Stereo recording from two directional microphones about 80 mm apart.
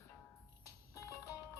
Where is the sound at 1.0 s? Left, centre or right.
Left.